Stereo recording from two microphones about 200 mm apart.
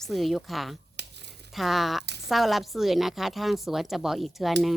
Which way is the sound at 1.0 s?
60° right (ahead or behind).